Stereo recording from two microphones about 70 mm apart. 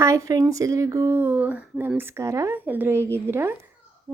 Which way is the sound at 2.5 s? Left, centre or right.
Right.